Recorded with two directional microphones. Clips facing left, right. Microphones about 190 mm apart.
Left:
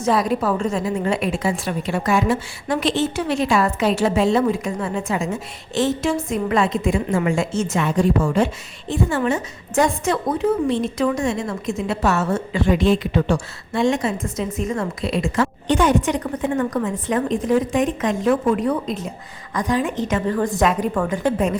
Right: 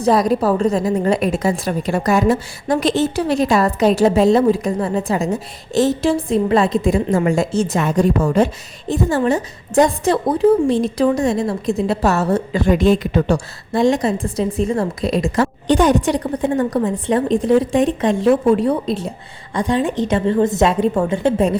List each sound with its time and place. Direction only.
0.0 s a woman's voice: 40° right (ahead or behind)